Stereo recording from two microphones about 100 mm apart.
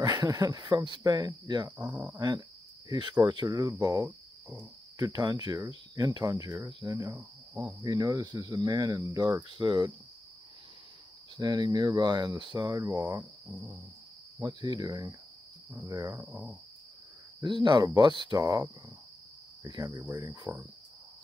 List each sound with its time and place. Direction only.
0.0 s speech: 40° right (ahead or behind)
1.9 s cricket: 15° right (ahead or behind)
2.1 s speech: 40° right (ahead or behind)
11.3 s speech: 45° right (ahead or behind)
12.5 s speech: 35° right (ahead or behind)
12.9 s cricket: 15° right (ahead or behind)
14.4 s speech: 45° right (ahead or behind)
16.3 s cricket: 15° right (ahead or behind)
17.4 s speech: 50° right (ahead or behind); by 20.0 s 35° right (ahead or behind)
20.2 s speech: 45° right (ahead or behind)